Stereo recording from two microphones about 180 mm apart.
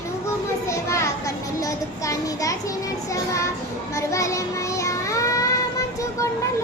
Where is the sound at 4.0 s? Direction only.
15° left (ahead or behind).